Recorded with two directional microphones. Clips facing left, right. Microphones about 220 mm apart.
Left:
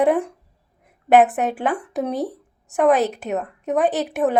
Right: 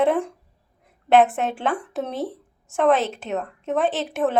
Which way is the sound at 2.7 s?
15° left (ahead or behind).